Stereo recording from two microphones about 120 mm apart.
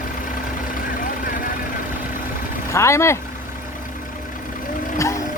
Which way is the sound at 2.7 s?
25° left (ahead or behind).